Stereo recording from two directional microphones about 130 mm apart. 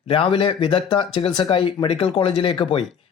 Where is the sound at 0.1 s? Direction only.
45° left (ahead or behind).